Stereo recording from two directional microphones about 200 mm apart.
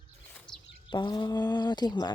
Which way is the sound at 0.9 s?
20° left (ahead or behind).